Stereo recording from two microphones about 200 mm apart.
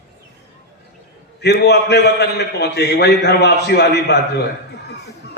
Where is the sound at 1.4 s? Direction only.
55° left (ahead or behind).